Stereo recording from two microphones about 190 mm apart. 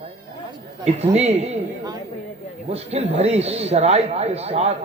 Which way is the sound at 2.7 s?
35° right (ahead or behind).